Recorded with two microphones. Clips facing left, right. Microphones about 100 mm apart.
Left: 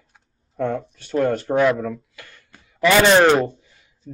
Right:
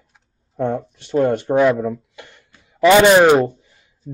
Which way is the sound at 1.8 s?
20° right (ahead or behind).